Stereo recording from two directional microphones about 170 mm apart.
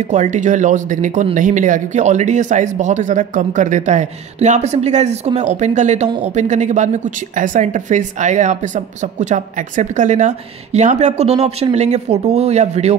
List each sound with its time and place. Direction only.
0.1 s speech: 45° right (ahead or behind)